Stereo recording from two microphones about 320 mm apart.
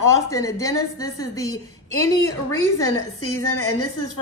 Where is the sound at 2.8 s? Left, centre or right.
Left.